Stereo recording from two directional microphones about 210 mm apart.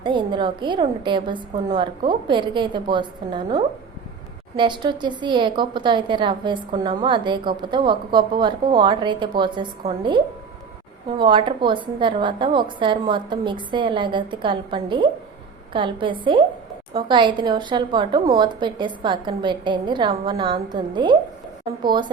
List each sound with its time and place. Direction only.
0.0 s speech: 20° right (ahead or behind)
11.2 s speech: 20° right (ahead or behind)